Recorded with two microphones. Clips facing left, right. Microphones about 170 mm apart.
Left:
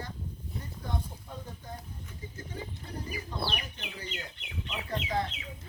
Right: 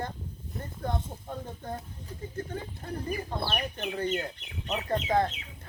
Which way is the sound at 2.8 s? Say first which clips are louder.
Right 6 dB; 50° right (ahead or behind).